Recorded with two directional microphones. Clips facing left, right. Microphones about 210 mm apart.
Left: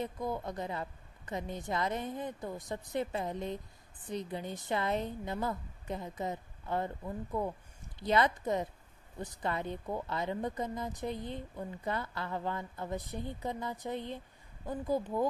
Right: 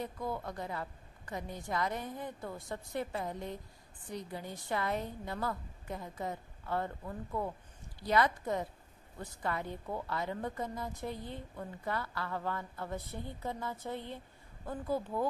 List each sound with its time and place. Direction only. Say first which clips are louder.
0.0 s a woman's voice: left 2 dB; 20° left (ahead or behind)